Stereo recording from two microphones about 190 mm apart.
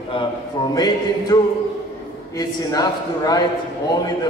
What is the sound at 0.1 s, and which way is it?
A man's voice, 25° left (ahead or behind).